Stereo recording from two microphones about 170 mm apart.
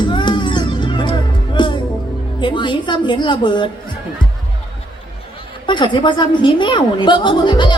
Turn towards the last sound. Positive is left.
turn(degrees=25)  # may be behind; listen again after turning